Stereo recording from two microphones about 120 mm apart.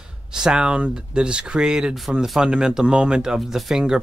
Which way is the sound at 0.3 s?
5° right (ahead or behind).